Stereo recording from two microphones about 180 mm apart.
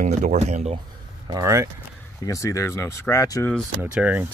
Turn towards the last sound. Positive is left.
turn(degrees=-10)  # may be behind; listen again after turning